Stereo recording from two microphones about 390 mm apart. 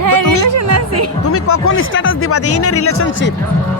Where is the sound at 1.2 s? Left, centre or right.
Left.